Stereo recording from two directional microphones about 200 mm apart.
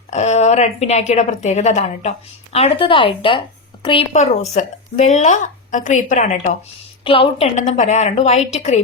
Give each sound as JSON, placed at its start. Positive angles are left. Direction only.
{"t": 0.1, "sound": "a woman's voice", "side_deg": 35}